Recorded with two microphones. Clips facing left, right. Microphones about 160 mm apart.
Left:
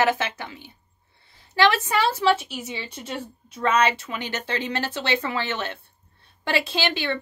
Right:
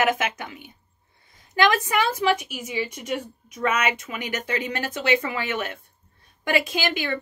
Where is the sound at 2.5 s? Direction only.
30° left (ahead or behind).